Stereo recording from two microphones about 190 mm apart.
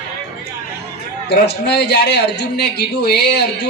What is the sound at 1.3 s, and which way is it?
A man's voice, 60° left (ahead or behind).